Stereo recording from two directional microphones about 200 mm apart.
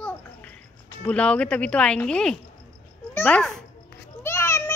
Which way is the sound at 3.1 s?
10° left (ahead or behind).